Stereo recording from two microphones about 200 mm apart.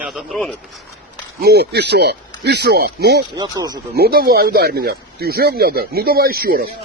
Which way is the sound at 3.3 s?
20° right (ahead or behind).